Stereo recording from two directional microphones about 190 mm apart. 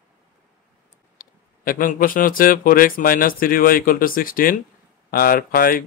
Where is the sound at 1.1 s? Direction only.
50° left (ahead or behind).